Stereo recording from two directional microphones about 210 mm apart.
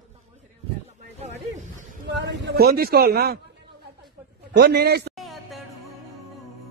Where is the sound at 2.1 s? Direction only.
50° right (ahead or behind).